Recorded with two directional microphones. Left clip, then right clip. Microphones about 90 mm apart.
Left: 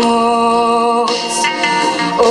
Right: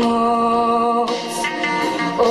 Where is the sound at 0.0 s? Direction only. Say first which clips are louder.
Left 5 dB; 30° left (ahead or behind).